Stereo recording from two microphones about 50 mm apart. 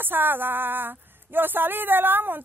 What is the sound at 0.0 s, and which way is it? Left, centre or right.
Speech, right.